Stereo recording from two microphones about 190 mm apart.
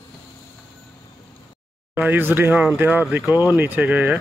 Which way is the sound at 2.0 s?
10° right (ahead or behind).